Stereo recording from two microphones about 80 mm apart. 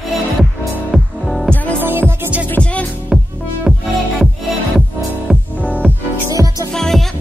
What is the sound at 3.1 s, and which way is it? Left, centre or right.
Music, centre.